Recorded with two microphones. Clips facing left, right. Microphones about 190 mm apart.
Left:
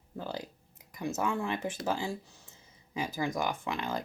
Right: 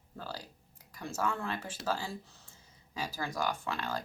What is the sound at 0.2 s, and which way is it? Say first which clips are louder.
A woman's voice: left 5 dB; 20° left (ahead or behind).